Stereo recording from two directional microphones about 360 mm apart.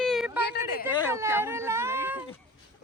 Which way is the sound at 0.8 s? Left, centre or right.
Centre.